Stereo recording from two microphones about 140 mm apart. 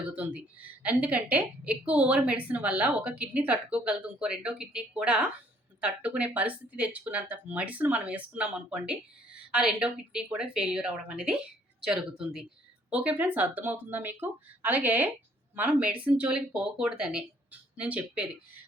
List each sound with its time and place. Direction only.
0.1 s a woman's voice: 10° right (ahead or behind)